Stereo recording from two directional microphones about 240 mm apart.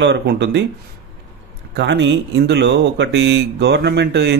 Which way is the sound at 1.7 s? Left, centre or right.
Right.